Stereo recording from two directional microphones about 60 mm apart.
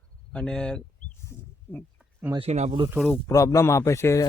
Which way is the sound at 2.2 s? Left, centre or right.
Right.